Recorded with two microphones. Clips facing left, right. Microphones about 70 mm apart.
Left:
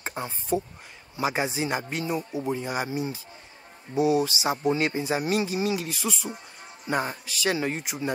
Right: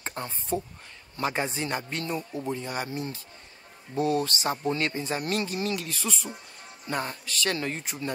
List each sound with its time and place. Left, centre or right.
0.0 s speech: centre